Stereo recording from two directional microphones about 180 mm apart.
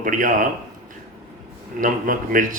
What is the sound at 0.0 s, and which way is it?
Speech, 45° right (ahead or behind).